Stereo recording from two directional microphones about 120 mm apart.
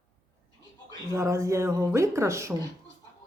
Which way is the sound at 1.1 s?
25° right (ahead or behind).